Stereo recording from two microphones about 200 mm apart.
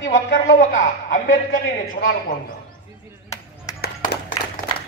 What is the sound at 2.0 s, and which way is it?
Speech, 45° left (ahead or behind).